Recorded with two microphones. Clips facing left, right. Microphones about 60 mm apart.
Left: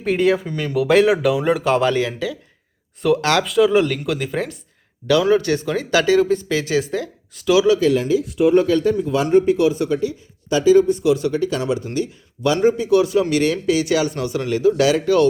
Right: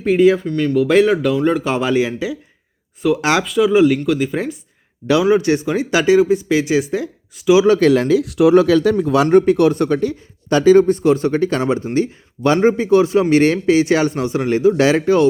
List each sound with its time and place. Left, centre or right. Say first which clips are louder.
0.0 s speech: right 5 dB; centre
3.4 s speech: right 3 dB; centre
5.2 s speech: right 3 dB; centre
7.8 s speech: right 4 dB; right